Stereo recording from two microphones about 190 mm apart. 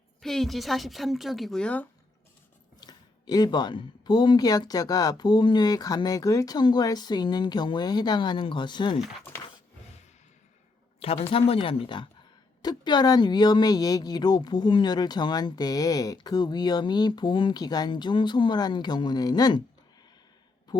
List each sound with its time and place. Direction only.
0.2 s a woman's voice: centre (ahead or behind)
2.8 s speech: 20° left (ahead or behind)
11.0 s speech: 30° left (ahead or behind)